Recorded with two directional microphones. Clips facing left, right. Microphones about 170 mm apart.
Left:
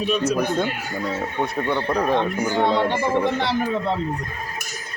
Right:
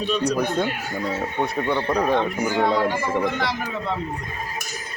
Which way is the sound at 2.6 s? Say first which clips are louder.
Left 1 dB; 25° left (ahead or behind).